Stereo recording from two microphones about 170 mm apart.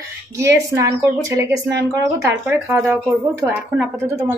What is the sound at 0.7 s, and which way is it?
Speech, 15° right (ahead or behind).